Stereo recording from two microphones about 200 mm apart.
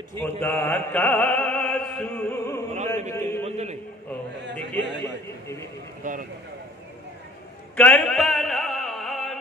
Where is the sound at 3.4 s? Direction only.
35° right (ahead or behind).